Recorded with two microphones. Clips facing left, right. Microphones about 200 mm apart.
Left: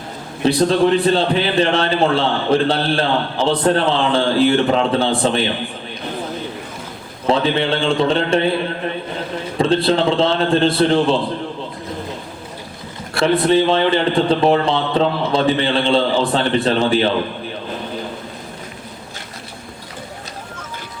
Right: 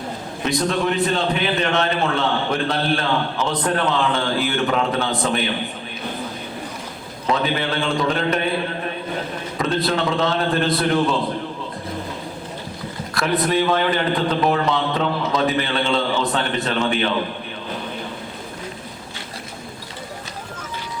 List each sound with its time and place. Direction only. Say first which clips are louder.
0.4 s a man's voice: left 7 dB; 30° left (ahead or behind)
7.3 s a man's voice: left 5 dB; 30° left (ahead or behind)
9.6 s a man's voice: left 6 dB; 30° left (ahead or behind)
13.1 s a man's voice: left 5 dB; 30° left (ahead or behind)